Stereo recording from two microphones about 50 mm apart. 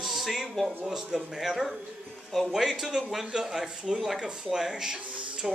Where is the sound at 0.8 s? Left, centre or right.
Centre.